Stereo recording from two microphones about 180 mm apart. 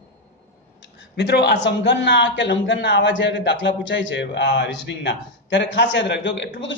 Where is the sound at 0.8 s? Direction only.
75° left (ahead or behind).